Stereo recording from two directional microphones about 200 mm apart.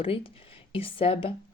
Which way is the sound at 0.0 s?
25° left (ahead or behind).